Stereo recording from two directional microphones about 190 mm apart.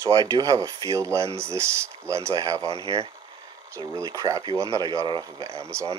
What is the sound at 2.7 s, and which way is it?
Speech, 25° left (ahead or behind).